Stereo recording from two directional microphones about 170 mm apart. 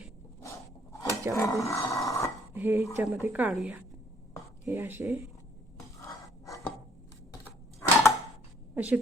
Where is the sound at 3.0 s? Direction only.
10° right (ahead or behind).